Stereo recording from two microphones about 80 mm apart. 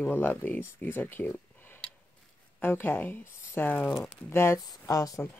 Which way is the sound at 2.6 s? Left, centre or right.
Left.